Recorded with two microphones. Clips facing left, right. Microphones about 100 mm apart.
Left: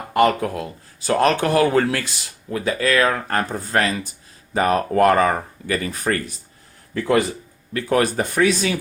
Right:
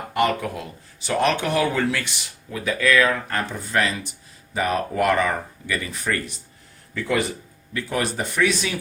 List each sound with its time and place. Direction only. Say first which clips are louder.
0.2 s speech: left 5 dB; 40° left (ahead or behind)
7.7 s speech: left 6 dB; 60° left (ahead or behind)